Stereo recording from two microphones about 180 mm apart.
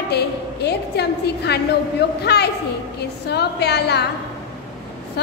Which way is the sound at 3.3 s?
65° left (ahead or behind).